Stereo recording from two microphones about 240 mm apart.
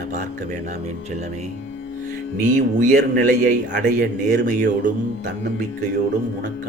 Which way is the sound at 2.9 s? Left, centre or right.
Right.